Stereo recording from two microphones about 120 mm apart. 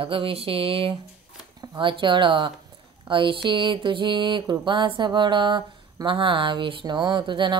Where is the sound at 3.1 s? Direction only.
45° right (ahead or behind).